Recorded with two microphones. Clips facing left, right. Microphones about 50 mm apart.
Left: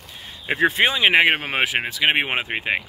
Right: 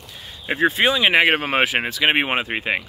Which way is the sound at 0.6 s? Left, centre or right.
Left.